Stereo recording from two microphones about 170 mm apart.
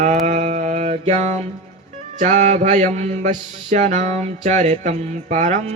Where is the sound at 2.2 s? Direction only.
45° right (ahead or behind).